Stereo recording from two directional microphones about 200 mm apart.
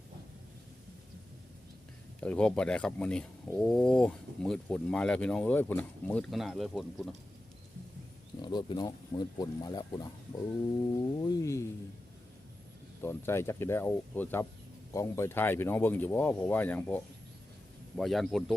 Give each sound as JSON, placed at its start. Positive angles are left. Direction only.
{"t": 2.2, "sound": "speech", "side_deg": 5}
{"t": 8.4, "sound": "speech", "side_deg": 20}
{"t": 13.0, "sound": "speech", "side_deg": 10}